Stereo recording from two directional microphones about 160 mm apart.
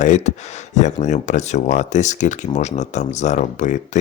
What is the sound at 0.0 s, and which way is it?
Speech, 50° left (ahead or behind).